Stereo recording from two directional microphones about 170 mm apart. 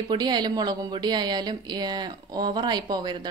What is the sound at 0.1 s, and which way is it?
Speech, 25° right (ahead or behind).